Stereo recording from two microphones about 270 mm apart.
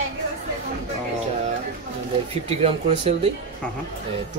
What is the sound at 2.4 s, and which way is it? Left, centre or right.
Speech, right.